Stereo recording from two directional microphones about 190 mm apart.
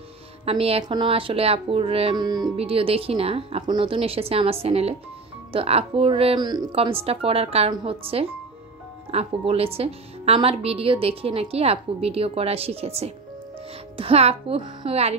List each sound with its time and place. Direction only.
0.5 s a woman's voice: 30° right (ahead or behind)